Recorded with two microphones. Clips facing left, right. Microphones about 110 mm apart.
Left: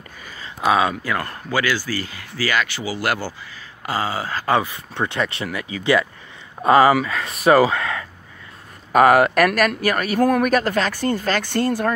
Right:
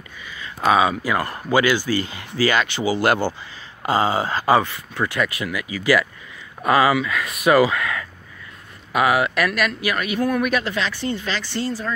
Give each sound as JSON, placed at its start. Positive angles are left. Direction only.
{"t": 0.2, "sound": "a sound", "side_deg": 40}
{"t": 0.6, "sound": "speech", "side_deg": 0}
{"t": 1.1, "sound": "speech", "side_deg": -15}
{"t": 4.9, "sound": "speech", "side_deg": 25}
{"t": 8.9, "sound": "speech", "side_deg": 45}